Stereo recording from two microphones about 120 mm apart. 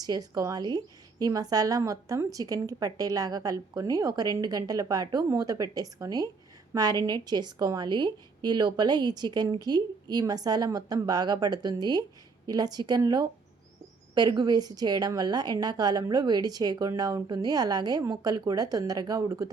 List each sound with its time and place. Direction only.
0.0 s a woman's voice: 30° right (ahead or behind)